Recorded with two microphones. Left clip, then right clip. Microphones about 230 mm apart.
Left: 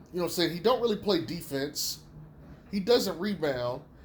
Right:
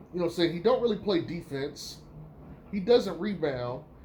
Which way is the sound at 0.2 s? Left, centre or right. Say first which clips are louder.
Right 1 dB; left.